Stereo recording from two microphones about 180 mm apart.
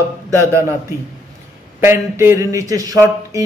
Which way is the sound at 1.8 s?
15° right (ahead or behind).